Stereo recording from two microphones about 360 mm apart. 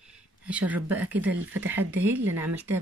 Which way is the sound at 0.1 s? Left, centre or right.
Centre.